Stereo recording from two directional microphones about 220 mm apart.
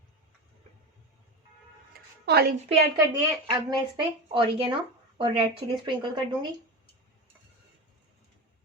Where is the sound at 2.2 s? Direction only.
45° right (ahead or behind).